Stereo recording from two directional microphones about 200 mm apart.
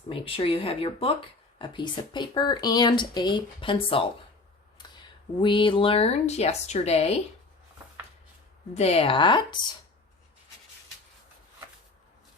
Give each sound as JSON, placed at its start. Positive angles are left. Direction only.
{"t": 0.1, "sound": "speech", "side_deg": 25}
{"t": 5.4, "sound": "a woman's voice", "side_deg": 25}
{"t": 8.7, "sound": "speech", "side_deg": 30}